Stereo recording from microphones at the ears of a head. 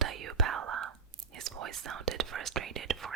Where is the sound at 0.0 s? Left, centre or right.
Right.